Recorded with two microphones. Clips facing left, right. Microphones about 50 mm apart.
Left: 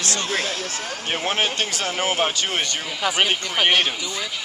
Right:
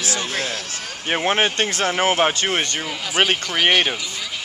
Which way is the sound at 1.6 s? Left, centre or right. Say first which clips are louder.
Right 4 dB; right.